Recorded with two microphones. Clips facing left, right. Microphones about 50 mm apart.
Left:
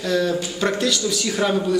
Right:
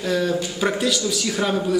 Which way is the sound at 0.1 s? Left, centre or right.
Centre.